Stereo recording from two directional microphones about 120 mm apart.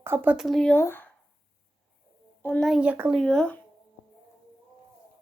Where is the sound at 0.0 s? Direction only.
15° right (ahead or behind).